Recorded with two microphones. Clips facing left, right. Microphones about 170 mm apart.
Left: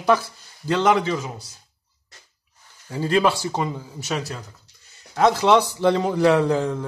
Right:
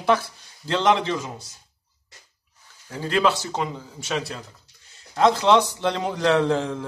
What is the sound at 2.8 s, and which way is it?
A man's voice, 10° left (ahead or behind).